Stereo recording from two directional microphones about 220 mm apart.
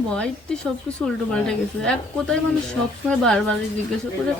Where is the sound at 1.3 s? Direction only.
5° left (ahead or behind).